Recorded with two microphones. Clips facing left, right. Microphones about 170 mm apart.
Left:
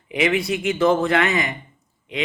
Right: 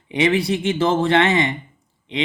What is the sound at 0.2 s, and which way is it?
A man's voice, 30° right (ahead or behind).